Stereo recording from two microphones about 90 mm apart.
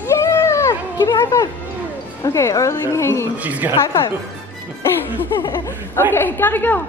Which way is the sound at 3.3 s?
15° right (ahead or behind).